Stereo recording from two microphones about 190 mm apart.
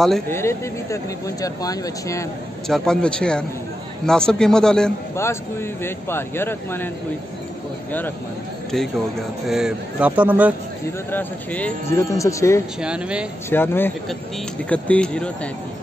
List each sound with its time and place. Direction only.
0.3 s speech: 15° left (ahead or behind)
2.7 s a man's voice: 5° left (ahead or behind)
5.1 s speech: 15° left (ahead or behind)
8.7 s a man's voice: centre (ahead or behind)
11.1 s speech: 10° left (ahead or behind)
12.8 s a man's voice: 5° right (ahead or behind)
13.5 s a man's voice: 10° left (ahead or behind)